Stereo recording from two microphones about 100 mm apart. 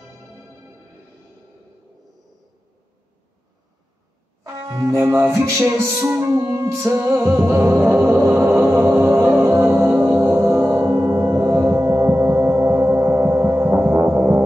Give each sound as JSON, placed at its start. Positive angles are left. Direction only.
{"t": 4.6, "sound": "music", "side_deg": -40}
{"t": 8.4, "sound": "music", "side_deg": -10}
{"t": 8.8, "sound": "music", "side_deg": -25}
{"t": 10.0, "sound": "gong", "side_deg": -20}